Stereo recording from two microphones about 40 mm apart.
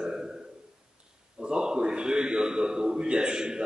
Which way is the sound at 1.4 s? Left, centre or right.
Right.